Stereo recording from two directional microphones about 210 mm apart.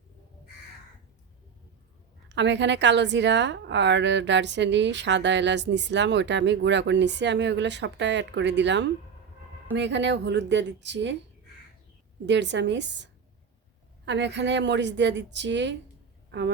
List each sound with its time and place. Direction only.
2.3 s a woman's voice: 55° right (ahead or behind)
12.2 s a woman's voice: 55° right (ahead or behind)